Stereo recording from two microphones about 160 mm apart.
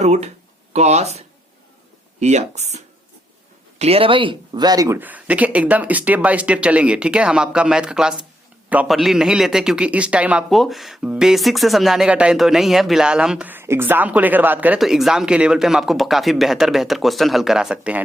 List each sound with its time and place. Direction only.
0.0 s a man's voice: 45° right (ahead or behind); by 18.0 s 5° right (ahead or behind)